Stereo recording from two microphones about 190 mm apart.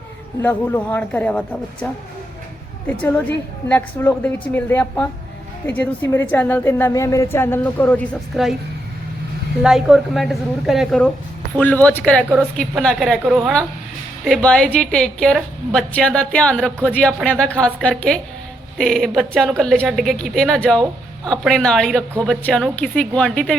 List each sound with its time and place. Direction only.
0.4 s a woman's voice: 10° left (ahead or behind)
9.6 s a woman's voice: centre (ahead or behind)